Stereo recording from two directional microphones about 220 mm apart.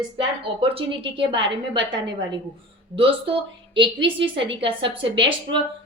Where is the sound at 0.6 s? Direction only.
25° right (ahead or behind).